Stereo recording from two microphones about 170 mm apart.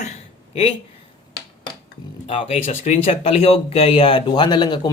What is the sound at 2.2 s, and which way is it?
Speech, 35° left (ahead or behind).